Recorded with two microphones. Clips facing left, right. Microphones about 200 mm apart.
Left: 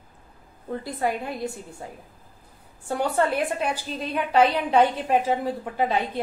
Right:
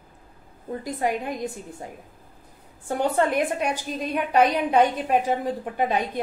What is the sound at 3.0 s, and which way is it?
A woman's voice, 15° right (ahead or behind).